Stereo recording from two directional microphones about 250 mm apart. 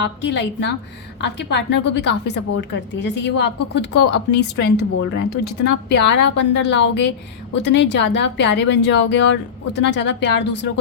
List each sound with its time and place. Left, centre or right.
0.2 s speech: left
5.9 s speech: left